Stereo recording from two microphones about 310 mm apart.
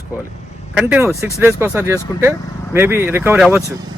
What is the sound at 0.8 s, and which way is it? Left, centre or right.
Speech, centre.